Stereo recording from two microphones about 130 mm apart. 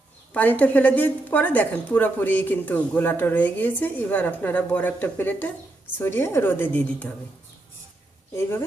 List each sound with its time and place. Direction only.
0.3 s a woman's voice: 10° left (ahead or behind)
8.4 s speech: 20° left (ahead or behind)